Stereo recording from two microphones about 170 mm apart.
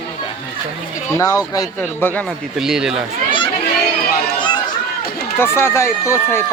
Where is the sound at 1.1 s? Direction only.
20° left (ahead or behind).